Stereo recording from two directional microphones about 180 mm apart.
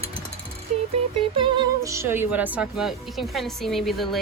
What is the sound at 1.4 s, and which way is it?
Speech, 20° right (ahead or behind).